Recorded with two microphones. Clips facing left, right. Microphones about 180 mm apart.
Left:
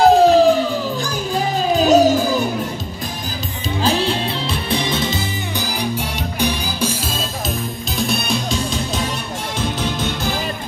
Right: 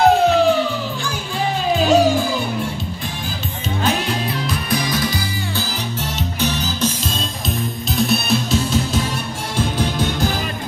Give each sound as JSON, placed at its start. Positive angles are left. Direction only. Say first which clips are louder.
{"t": 0.0, "sound": "music", "louder": "left 3 dB", "side_deg": 35}
{"t": 3.8, "sound": "music", "louder": "left 2 dB", "side_deg": 30}
{"t": 6.1, "sound": "music", "louder": "left 1 dB", "side_deg": 10}
{"t": 7.9, "sound": "music", "louder": "right 3 dB", "side_deg": 0}